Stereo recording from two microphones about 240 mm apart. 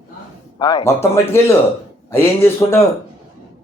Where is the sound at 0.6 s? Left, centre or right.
Centre.